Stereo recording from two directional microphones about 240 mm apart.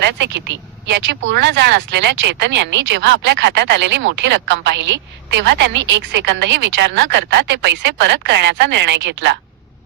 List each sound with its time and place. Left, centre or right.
0.0 s speech: right